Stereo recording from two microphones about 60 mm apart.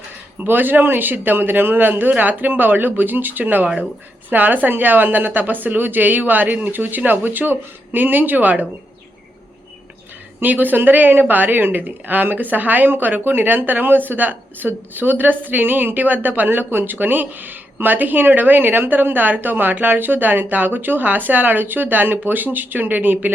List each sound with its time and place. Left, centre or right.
0.3 s speech: right
10.4 s speech: right